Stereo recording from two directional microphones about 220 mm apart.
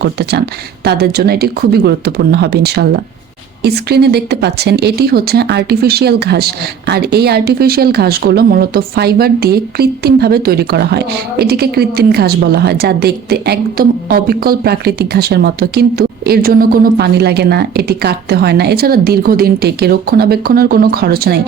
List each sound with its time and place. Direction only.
0.0 s speech: 50° right (ahead or behind)